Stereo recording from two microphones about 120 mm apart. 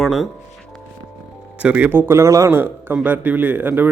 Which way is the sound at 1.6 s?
10° right (ahead or behind).